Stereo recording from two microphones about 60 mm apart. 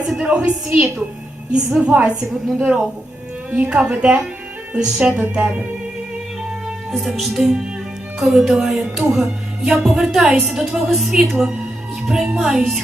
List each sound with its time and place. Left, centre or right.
0.3 s speech: centre
6.9 s speech: centre